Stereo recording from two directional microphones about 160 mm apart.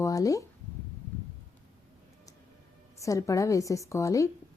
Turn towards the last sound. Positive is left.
turn(degrees=20)  # may be behind; listen again after turning